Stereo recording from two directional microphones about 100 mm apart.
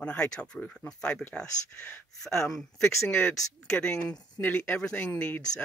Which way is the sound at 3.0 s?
20° left (ahead or behind).